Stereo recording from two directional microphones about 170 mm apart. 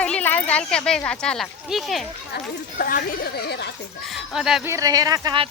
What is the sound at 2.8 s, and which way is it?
Speech, 65° left (ahead or behind).